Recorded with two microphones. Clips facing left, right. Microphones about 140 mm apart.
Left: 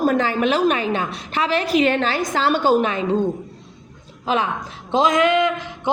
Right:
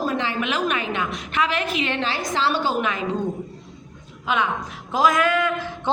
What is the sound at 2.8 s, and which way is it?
Speech, 35° left (ahead or behind).